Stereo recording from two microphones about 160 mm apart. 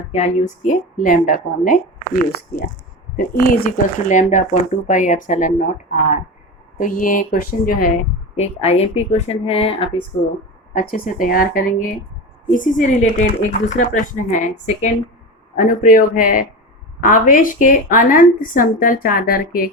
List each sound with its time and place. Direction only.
0.1 s a woman's voice: 45° left (ahead or behind); by 7.9 s 65° left (ahead or behind)
8.4 s a woman's voice: 40° left (ahead or behind)
10.8 s a woman's voice: 60° left (ahead or behind)